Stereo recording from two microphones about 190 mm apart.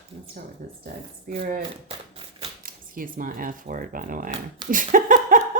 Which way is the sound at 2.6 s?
50° right (ahead or behind).